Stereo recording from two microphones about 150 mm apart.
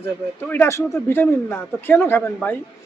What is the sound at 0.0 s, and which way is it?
A woman's voice, 15° left (ahead or behind).